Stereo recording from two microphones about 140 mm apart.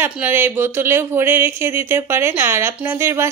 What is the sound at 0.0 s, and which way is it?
Speech, 15° right (ahead or behind).